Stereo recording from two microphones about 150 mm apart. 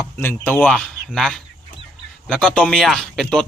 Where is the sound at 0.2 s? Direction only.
15° left (ahead or behind).